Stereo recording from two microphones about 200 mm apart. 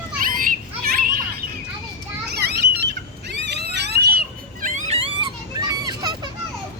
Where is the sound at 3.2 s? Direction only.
60° right (ahead or behind).